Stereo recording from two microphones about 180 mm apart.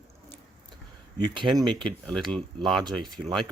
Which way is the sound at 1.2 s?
25° right (ahead or behind).